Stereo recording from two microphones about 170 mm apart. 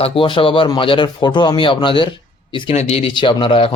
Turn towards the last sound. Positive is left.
turn(degrees=30)  # may be behind; listen again after turning